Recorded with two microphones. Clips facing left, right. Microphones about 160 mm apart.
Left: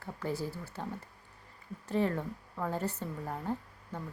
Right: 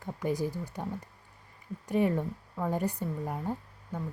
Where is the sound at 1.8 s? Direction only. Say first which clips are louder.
Right 3 dB; 15° right (ahead or behind).